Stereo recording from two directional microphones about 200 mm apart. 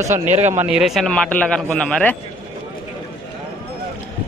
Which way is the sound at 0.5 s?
5° right (ahead or behind).